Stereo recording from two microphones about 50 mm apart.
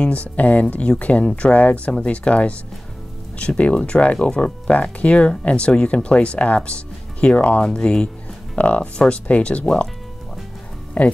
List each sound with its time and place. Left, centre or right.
0.0 s speech: left
11.0 s speech: left